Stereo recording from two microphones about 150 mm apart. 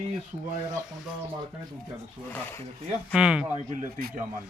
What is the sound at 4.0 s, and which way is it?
Speech, 90° right.